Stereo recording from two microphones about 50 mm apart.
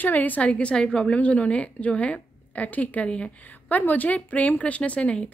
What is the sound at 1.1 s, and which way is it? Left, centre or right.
Speech, left.